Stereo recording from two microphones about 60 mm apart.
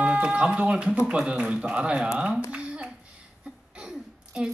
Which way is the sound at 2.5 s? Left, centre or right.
Centre.